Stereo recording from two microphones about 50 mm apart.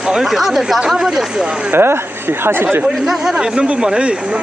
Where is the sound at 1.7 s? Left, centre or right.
Right.